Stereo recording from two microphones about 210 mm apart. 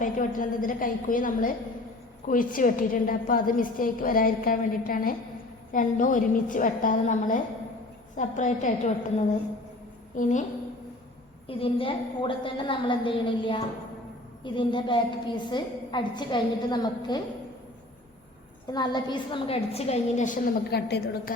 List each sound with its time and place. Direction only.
0.0 s a woman's voice: 40° left (ahead or behind)
10.2 s a woman's voice: 35° left (ahead or behind)
11.4 s a woman's voice: 25° left (ahead or behind)
18.7 s a woman's voice: 20° left (ahead or behind); by 21.3 s 50° left (ahead or behind)